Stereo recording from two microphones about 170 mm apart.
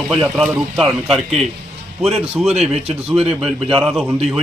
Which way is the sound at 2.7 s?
35° right (ahead or behind).